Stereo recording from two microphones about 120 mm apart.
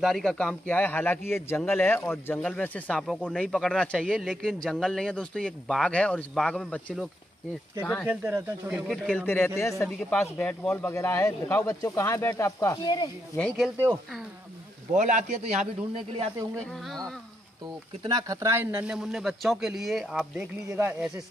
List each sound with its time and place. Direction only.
0.0 s a man's voice: 5° left (ahead or behind)
8.1 s speech: 15° right (ahead or behind)
8.8 s speech: centre (ahead or behind)
9.2 s a man's voice: 20° left (ahead or behind); by 13.1 s 35° left (ahead or behind)
14.9 s a man's voice: 90° right
18.0 s speech: 30° right (ahead or behind); by 20.4 s 5° right (ahead or behind)
20.6 s speech: 25° right (ahead or behind)